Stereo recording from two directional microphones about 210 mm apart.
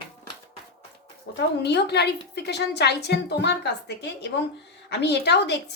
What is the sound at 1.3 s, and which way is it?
Speech, 55° left (ahead or behind).